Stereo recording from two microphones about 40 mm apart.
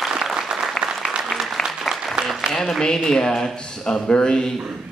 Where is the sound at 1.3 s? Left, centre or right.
Centre.